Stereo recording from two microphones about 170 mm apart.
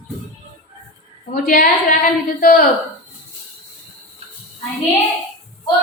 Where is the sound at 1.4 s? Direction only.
55° left (ahead or behind).